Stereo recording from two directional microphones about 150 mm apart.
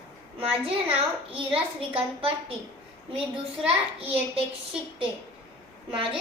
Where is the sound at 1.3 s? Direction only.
35° right (ahead or behind).